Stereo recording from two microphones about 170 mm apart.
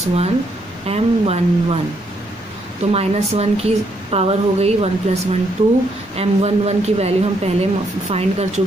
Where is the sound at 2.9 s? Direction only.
35° right (ahead or behind).